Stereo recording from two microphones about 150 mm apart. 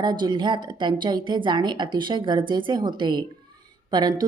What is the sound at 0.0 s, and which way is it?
Speech, 30° right (ahead or behind).